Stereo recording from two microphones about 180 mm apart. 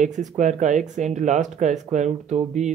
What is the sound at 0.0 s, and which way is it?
Speech, 45° right (ahead or behind).